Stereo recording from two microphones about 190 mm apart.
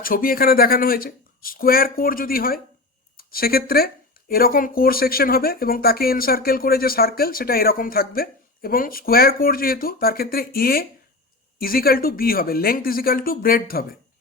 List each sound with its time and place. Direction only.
0.0 s speech: 50° left (ahead or behind)